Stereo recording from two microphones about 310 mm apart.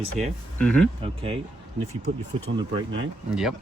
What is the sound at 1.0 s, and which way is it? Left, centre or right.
Speech, centre.